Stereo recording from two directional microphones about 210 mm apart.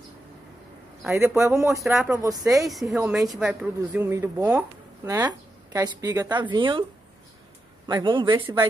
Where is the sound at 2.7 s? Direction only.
Centre (ahead or behind); by 6.8 s 20° right (ahead or behind).